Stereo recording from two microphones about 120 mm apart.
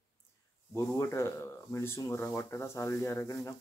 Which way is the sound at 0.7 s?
20° left (ahead or behind).